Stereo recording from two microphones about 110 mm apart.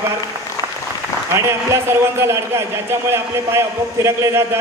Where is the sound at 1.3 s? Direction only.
25° right (ahead or behind).